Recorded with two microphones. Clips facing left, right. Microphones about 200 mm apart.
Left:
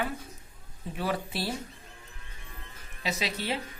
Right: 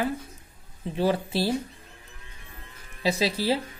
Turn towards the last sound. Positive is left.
turn(degrees=-30)  # may be behind; listen again after turning